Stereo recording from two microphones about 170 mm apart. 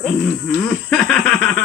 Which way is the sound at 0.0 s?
5° left (ahead or behind).